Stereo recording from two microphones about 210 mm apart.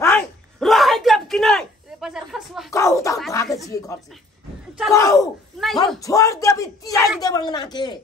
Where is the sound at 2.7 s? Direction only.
15° left (ahead or behind).